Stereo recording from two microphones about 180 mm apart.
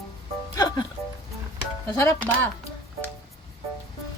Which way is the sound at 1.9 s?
15° left (ahead or behind).